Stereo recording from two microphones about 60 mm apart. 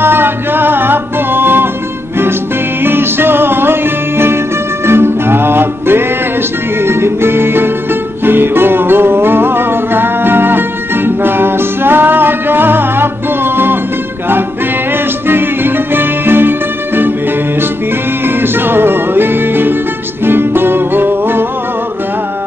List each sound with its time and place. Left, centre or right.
0.0 s music: right
2.8 s music: right
15.2 s music: right
18.2 s music: right